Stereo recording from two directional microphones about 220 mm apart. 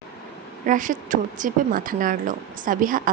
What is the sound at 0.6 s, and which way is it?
A woman's voice, 35° right (ahead or behind).